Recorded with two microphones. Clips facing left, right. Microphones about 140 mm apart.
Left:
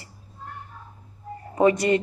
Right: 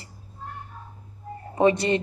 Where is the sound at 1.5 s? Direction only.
25° right (ahead or behind).